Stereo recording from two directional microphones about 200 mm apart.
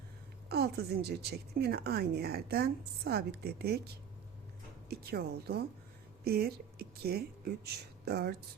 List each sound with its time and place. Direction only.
0.4 s a woman's voice: 50° right (ahead or behind)
4.9 s a woman's voice: 50° right (ahead or behind)